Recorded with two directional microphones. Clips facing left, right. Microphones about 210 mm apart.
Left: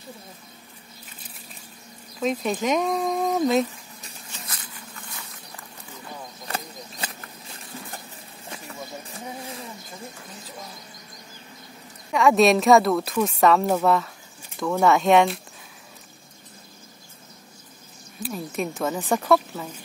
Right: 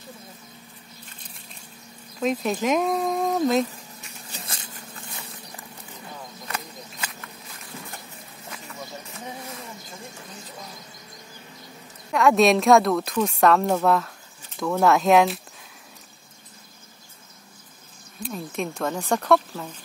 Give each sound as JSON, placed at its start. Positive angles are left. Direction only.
{"t": 2.1, "sound": "speech", "side_deg": 0}
{"t": 4.3, "sound": "a sound", "side_deg": -30}
{"t": 6.4, "sound": "a sound", "side_deg": 35}
{"t": 8.5, "sound": "bird", "side_deg": 30}
{"t": 12.1, "sound": "a woman's voice", "side_deg": 0}
{"t": 18.2, "sound": "a woman's voice", "side_deg": 5}